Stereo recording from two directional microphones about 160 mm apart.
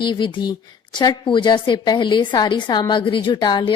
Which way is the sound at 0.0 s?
30° left (ahead or behind).